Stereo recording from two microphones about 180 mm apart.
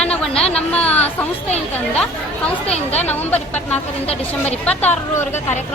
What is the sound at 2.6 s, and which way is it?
Speech, 35° left (ahead or behind).